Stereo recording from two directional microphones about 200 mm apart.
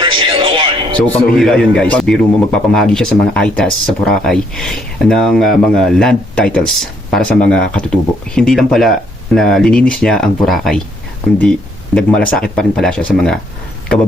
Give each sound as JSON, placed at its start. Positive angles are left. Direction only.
{"t": 0.0, "sound": "music", "side_deg": -25}
{"t": 0.9, "sound": "speech", "side_deg": 10}
{"t": 11.9, "sound": "speech", "side_deg": 5}